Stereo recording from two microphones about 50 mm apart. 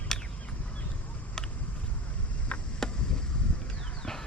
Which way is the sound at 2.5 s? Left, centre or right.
Left.